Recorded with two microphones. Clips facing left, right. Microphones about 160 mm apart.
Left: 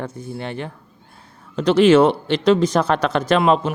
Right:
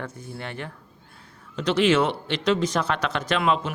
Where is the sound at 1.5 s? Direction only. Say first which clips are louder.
Left 8 dB; 40° left (ahead or behind).